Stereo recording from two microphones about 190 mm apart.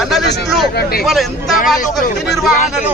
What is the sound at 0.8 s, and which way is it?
Speech, 55° left (ahead or behind).